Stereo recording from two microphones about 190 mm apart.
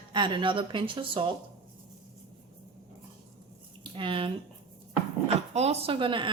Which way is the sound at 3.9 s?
25° right (ahead or behind).